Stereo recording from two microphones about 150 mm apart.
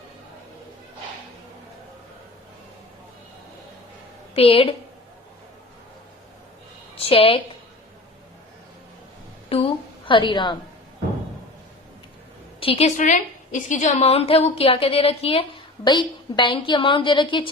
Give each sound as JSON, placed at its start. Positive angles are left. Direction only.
{"t": 4.4, "sound": "a woman's voice", "side_deg": 40}
{"t": 6.9, "sound": "a woman's voice", "side_deg": 40}
{"t": 9.5, "sound": "a woman's voice", "side_deg": 40}
{"t": 12.5, "sound": "a sound", "side_deg": 40}
{"t": 13.0, "sound": "a woman's voice", "side_deg": 55}